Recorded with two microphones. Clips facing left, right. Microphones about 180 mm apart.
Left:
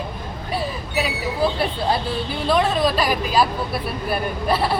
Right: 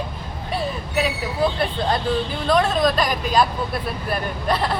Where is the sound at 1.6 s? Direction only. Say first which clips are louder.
Even; 5° left (ahead or behind).